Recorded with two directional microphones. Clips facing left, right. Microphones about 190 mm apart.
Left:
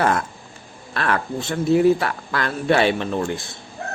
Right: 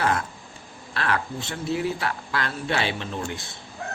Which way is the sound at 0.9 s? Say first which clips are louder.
Left 4 dB; 50° left (ahead or behind).